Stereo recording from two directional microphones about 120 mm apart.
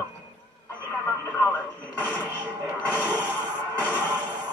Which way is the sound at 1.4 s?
15° left (ahead or behind).